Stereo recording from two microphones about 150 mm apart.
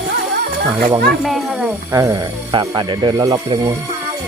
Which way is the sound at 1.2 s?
Centre (ahead or behind).